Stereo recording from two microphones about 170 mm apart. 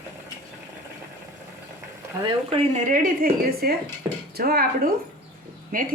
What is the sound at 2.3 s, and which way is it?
Speech, 35° right (ahead or behind).